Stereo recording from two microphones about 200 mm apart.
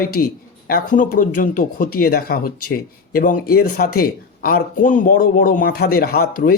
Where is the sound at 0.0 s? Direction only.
45° left (ahead or behind).